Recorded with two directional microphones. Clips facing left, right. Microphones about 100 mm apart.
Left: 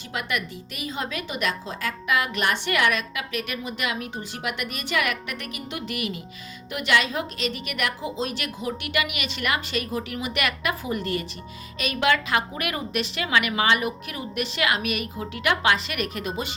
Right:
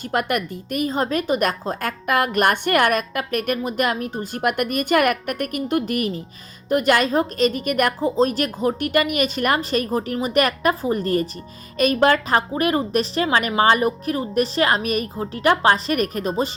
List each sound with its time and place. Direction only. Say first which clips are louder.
0.1 s a woman's voice: right 7 dB; 50° right (ahead or behind)